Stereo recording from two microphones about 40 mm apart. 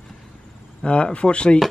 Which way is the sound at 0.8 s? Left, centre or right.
Left.